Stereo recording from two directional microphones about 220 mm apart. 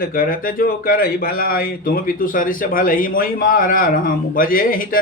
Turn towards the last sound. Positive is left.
turn(degrees=40)  # may be behind; listen again after turning